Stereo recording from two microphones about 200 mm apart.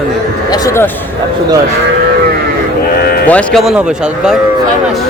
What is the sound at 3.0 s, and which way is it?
Sheep, 50° left (ahead or behind).